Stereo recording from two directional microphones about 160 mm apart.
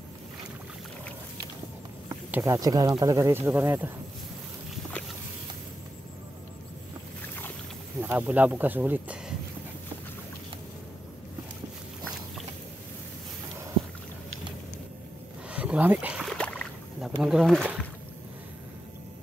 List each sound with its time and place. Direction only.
2.4 s speech: 25° right (ahead or behind)
8.0 s speech: 10° right (ahead or behind)
15.5 s boat: 10° right (ahead or behind)
17.2 s speech: 5° right (ahead or behind)